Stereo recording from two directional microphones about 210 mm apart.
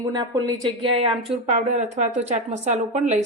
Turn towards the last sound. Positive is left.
turn(degrees=-35)  # may be behind; listen again after turning